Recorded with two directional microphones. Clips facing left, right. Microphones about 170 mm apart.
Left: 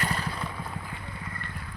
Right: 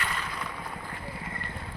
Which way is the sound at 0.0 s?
35° left (ahead or behind).